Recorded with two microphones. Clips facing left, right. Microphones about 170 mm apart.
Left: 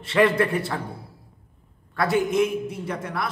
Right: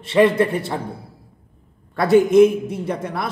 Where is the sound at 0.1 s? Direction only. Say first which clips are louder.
Right 4 dB; 20° right (ahead or behind).